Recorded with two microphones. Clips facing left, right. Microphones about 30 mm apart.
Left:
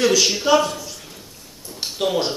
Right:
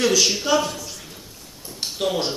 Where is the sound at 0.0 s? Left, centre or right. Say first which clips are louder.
Left 2 dB; centre.